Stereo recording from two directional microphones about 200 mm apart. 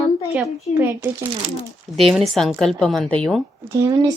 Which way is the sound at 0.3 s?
10° right (ahead or behind).